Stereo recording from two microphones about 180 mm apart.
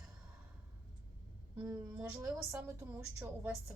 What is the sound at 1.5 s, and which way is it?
Speech, 15° right (ahead or behind).